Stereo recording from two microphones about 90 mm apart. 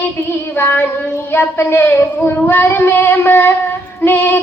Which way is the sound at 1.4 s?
25° left (ahead or behind).